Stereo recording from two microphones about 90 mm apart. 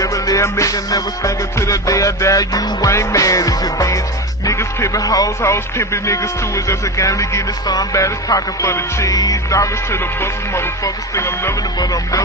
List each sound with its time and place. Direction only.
0.0 s speech: 40° left (ahead or behind)
11.1 s music: 30° left (ahead or behind)
11.8 s speech: 45° left (ahead or behind)